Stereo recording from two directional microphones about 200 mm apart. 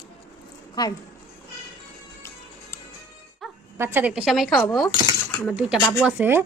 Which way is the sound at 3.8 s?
10° right (ahead or behind).